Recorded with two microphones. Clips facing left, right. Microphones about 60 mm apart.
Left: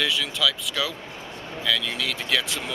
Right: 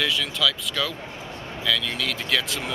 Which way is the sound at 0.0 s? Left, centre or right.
Centre.